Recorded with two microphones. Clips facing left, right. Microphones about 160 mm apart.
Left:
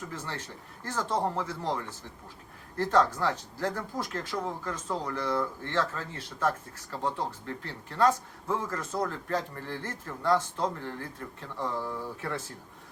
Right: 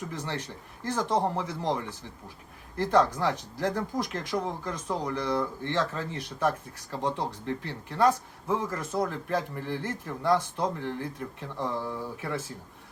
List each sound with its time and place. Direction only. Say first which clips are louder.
0.0 s speech: right 4 dB; 20° right (ahead or behind)